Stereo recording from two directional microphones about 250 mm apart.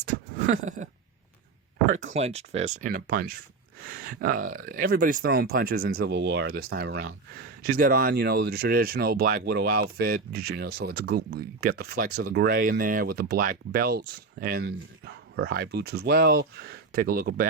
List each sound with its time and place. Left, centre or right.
0.4 s speech: right
1.9 s speech: right